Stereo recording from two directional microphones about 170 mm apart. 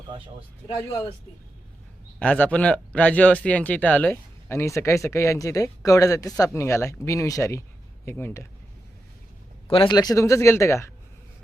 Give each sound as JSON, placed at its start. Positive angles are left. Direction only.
{"t": 2.1, "sound": "speech", "side_deg": 5}
{"t": 9.6, "sound": "speech", "side_deg": 30}